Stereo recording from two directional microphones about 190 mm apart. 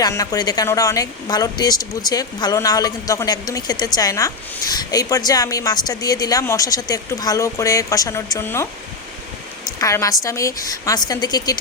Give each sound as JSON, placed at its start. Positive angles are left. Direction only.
{"t": 0.0, "sound": "a woman's voice", "side_deg": 20}
{"t": 9.7, "sound": "a woman's voice", "side_deg": 15}